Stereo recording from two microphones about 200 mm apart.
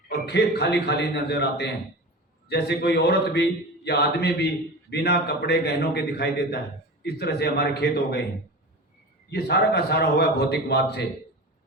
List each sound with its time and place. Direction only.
0.1 s a man's voice: 55° left (ahead or behind)
9.3 s a man's voice: 55° left (ahead or behind)